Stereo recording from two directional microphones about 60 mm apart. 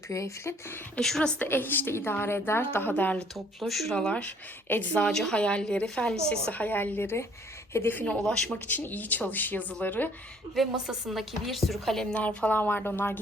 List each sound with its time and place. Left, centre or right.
0.1 s speech: left
0.9 s a woman's voice: centre
1.4 s a woman's voice: left
2.9 s speech: left
3.3 s speech: centre
3.9 s speech: centre
4.9 s a woman's voice: centre
6.5 s a woman's voice: left
8.2 s a woman's voice: centre
8.5 s a woman's voice: left
10.8 s speech: centre
12.1 s speech: left
12.5 s a woman's voice: left